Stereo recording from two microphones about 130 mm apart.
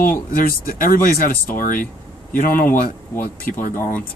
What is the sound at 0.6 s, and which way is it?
Speech, 90° left.